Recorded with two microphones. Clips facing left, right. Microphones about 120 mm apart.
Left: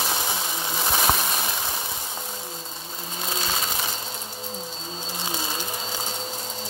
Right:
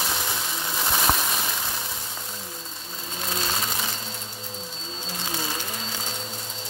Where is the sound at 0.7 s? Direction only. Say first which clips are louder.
Left 1 dB; 5° left (ahead or behind).